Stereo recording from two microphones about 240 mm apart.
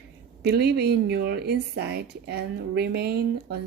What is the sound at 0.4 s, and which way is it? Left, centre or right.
Speech, right.